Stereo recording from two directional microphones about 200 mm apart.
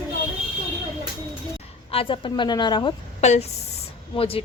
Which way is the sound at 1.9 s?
25° left (ahead or behind).